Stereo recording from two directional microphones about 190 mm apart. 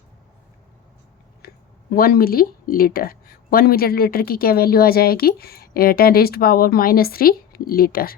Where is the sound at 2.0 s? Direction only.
50° left (ahead or behind).